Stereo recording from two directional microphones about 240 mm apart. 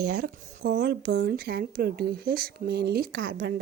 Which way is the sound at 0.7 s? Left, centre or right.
Right.